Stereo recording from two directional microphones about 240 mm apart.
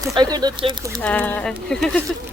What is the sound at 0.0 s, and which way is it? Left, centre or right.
Speech, centre.